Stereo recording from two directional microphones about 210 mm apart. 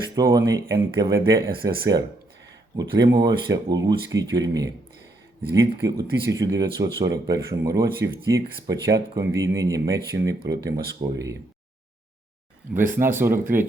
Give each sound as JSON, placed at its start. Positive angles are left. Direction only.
{"t": 0.2, "sound": "speech", "side_deg": -15}
{"t": 4.1, "sound": "speech", "side_deg": -60}
{"t": 4.4, "sound": "speech", "side_deg": -15}
{"t": 12.7, "sound": "speech", "side_deg": -10}